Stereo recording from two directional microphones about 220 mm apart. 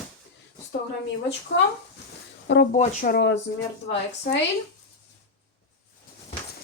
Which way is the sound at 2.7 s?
35° left (ahead or behind).